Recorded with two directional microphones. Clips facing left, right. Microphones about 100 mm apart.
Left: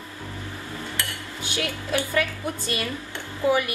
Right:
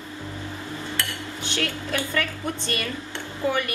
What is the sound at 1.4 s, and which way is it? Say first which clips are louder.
A woman's voice: right 1 dB; 10° left (ahead or behind).